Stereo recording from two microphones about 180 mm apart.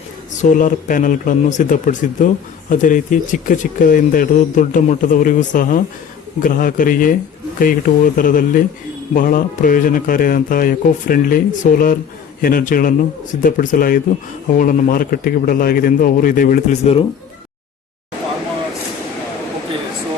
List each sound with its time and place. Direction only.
0.4 s speech: 45° left (ahead or behind)
16.8 s speech: 35° left (ahead or behind)